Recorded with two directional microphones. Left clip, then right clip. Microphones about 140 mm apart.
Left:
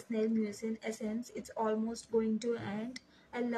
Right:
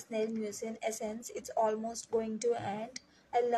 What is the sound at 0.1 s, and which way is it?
Speech, 50° right (ahead or behind).